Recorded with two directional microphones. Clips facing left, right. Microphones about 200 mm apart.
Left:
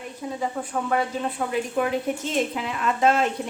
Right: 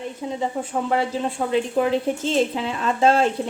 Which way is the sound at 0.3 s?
25° right (ahead or behind).